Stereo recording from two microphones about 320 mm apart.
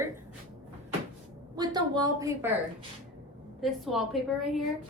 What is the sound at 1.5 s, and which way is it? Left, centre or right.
Speech, centre.